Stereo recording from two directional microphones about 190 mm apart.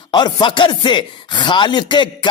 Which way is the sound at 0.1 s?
25° left (ahead or behind).